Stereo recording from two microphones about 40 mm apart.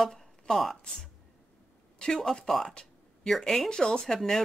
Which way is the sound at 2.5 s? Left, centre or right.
Centre.